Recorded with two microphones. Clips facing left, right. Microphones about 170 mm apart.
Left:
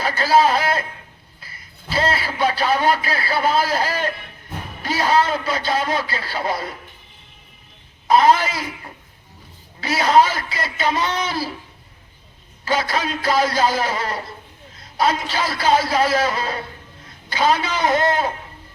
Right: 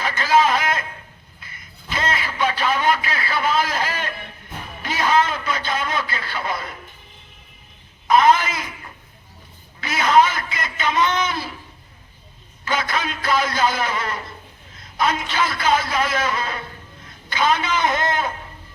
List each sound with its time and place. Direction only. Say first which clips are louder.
0.0 s a sound: left 2 dB; 35° left (ahead or behind)
1.4 s a man's voice: even; 35° left (ahead or behind)
8.0 s a man's voice: left 1 dB; 35° left (ahead or behind)
9.8 s a man's voice: left 1 dB; 35° left (ahead or behind)
12.6 s a man's voice: left 2 dB; 35° left (ahead or behind)